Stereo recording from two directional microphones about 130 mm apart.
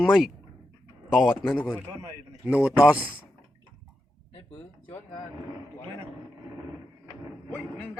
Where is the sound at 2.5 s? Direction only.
10° right (ahead or behind).